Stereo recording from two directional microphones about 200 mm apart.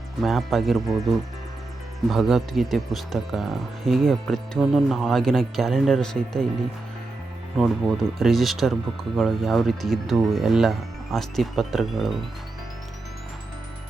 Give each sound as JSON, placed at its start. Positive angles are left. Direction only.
{"t": 0.2, "sound": "speech", "side_deg": 0}
{"t": 2.0, "sound": "speech", "side_deg": 0}
{"t": 7.5, "sound": "speech", "side_deg": 0}